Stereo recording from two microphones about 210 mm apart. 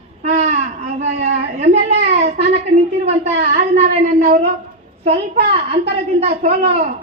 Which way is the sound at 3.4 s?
30° right (ahead or behind).